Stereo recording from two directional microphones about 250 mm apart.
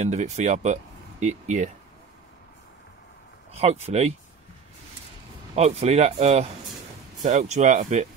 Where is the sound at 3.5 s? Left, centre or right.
Right.